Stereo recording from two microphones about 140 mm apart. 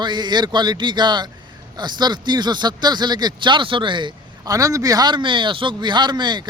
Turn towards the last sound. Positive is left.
turn(degrees=-30)  # may be behind; listen again after turning